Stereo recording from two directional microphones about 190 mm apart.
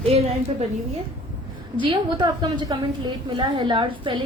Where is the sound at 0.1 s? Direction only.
30° right (ahead or behind).